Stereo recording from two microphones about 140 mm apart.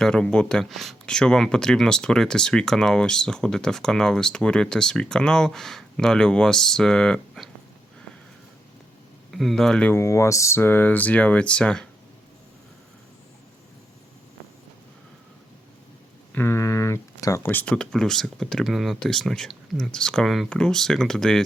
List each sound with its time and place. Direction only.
0.0 s speech: 5° left (ahead or behind)
9.3 s speech: centre (ahead or behind)
9.9 s speech: 20° left (ahead or behind)
16.3 s a sound: 15° left (ahead or behind)
17.4 s speech: 10° left (ahead or behind)